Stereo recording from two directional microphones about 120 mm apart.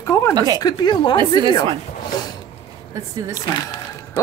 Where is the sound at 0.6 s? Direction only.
35° left (ahead or behind).